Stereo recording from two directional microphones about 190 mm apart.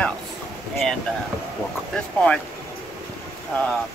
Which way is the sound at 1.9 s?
5° left (ahead or behind).